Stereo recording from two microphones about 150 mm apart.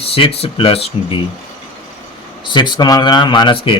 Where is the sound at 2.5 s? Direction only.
30° left (ahead or behind).